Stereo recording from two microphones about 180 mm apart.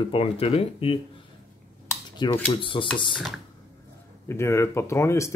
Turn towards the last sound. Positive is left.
turn(degrees=15)  # may be behind; listen again after turning